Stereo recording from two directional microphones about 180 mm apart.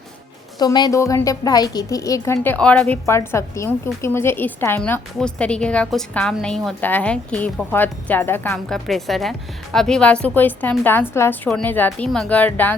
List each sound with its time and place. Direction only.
0.6 s a woman's voice: 20° left (ahead or behind)